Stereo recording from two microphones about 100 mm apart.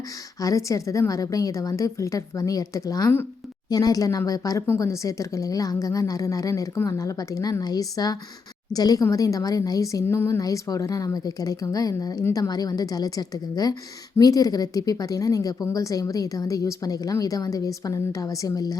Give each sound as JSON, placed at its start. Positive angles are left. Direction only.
{"t": 0.3, "sound": "a woman's voice", "side_deg": 35}